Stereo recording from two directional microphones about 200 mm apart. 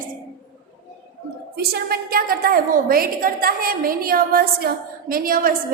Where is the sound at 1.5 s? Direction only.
50° right (ahead or behind).